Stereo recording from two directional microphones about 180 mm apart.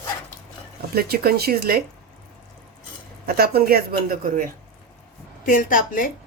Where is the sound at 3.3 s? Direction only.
60° right (ahead or behind).